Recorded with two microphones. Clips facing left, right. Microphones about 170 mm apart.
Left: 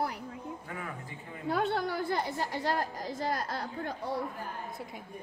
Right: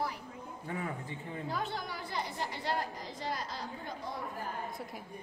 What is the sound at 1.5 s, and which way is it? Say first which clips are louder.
A woman's voice: left 10 dB; 60° left (ahead or behind).